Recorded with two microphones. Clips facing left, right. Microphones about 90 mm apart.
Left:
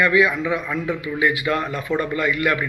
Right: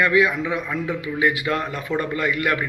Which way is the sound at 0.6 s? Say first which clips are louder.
Left 1 dB; 15° right (ahead or behind).